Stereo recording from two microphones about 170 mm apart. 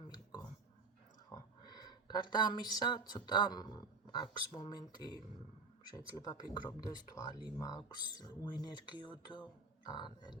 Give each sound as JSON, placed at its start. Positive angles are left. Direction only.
{"t": 0.1, "sound": "a sound", "side_deg": 25}
{"t": 1.3, "sound": "speech", "side_deg": 25}
{"t": 6.1, "sound": "speech", "side_deg": 20}